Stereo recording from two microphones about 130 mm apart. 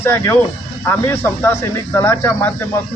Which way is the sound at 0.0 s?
20° left (ahead or behind).